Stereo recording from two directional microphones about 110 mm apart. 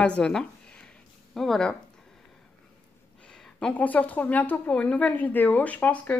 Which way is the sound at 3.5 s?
10° left (ahead or behind).